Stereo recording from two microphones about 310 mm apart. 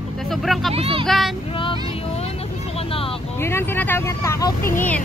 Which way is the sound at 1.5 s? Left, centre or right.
Centre.